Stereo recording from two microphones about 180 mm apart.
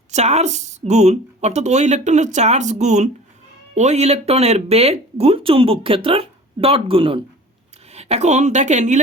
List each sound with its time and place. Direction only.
0.1 s speech: 40° right (ahead or behind)